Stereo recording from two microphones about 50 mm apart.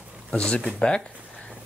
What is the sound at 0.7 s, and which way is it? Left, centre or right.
Speech, centre.